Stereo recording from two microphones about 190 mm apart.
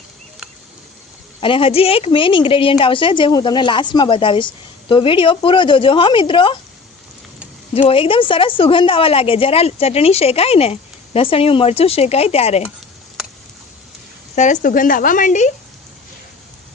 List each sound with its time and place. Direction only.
1.4 s speech: 30° left (ahead or behind)
7.7 s a woman's voice: 30° left (ahead or behind)
14.3 s speech: 40° left (ahead or behind)